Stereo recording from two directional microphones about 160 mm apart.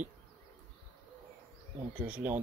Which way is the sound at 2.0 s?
10° right (ahead or behind).